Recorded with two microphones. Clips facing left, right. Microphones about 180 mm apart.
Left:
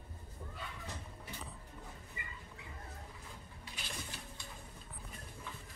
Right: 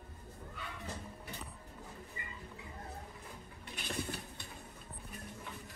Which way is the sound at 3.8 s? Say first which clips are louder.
Right 8 dB; 60° right (ahead or behind).